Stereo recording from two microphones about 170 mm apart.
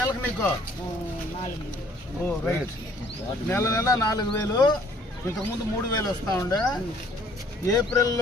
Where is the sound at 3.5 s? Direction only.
15° left (ahead or behind).